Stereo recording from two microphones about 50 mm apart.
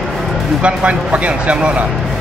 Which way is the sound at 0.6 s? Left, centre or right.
Right.